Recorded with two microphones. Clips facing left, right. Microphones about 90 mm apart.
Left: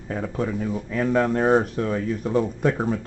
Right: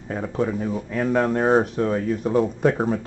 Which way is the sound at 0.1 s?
10° right (ahead or behind).